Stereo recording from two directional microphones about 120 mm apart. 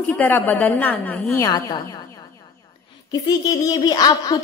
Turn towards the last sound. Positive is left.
turn(degrees=30)  # may be behind; listen again after turning